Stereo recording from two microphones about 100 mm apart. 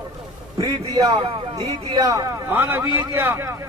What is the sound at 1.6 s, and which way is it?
Speech, 45° right (ahead or behind).